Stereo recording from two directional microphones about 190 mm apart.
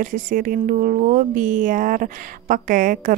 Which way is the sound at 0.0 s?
45° right (ahead or behind).